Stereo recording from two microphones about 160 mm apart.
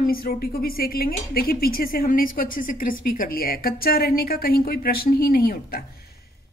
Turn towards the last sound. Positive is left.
turn(degrees=75)  # may be behind; listen again after turning